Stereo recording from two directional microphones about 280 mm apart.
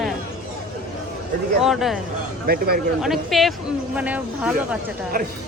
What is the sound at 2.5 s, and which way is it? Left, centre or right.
Speech, right.